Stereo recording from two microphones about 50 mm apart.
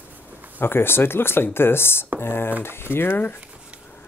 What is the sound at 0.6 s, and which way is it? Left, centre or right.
Speech, left.